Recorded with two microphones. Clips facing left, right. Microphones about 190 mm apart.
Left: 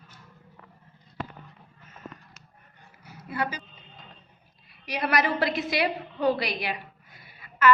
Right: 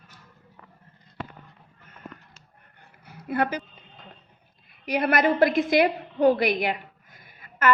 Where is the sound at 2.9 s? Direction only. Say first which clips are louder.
Right 7 dB; 55° right (ahead or behind).